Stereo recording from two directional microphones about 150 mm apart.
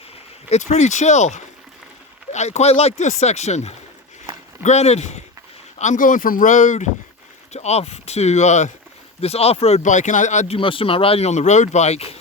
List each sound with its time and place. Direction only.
0.5 s speech: 50° left (ahead or behind)
5.8 s speech: 60° left (ahead or behind)
10.6 s speech: 35° left (ahead or behind)